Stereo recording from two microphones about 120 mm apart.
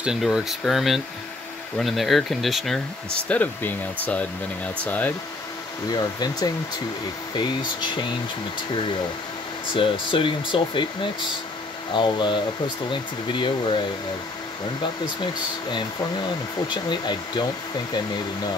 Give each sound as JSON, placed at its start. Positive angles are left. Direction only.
{"t": 0.0, "sound": "speech", "side_deg": -5}
{"t": 5.9, "sound": "speech", "side_deg": 35}
{"t": 9.8, "sound": "speech", "side_deg": 45}
{"t": 11.9, "sound": "speech", "side_deg": 40}
{"t": 16.6, "sound": "speech", "side_deg": 40}